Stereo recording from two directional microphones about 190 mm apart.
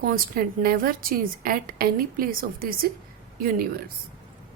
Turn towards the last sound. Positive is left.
turn(degrees=-50)  # may be behind; listen again after turning